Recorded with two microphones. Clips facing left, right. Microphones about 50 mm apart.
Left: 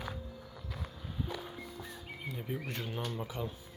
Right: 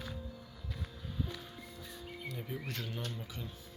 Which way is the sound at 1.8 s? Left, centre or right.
Centre.